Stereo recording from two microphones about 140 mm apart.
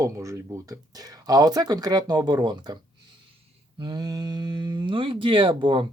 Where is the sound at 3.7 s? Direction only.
35° right (ahead or behind).